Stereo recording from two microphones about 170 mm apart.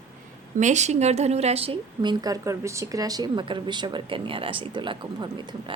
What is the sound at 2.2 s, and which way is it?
Speech, 20° right (ahead or behind).